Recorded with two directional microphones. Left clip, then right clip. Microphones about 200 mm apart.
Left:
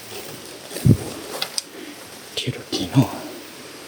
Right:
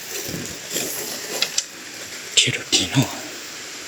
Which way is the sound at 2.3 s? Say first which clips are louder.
Right 9 dB; 15° left (ahead or behind).